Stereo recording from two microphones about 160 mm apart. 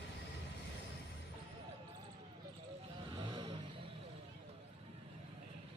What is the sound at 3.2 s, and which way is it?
Vehicle, 30° right (ahead or behind).